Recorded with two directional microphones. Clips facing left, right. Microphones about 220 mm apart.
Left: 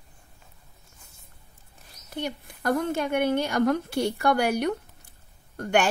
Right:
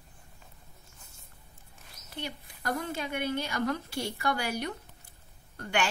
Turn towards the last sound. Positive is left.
turn(degrees=45)  # may be behind; listen again after turning